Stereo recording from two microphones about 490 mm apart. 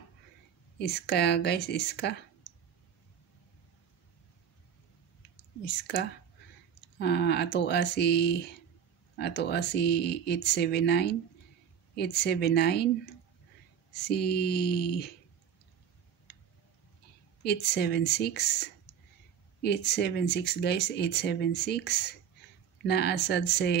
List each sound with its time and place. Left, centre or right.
0.7 s speech: centre
5.7 s speech: left
17.4 s speech: centre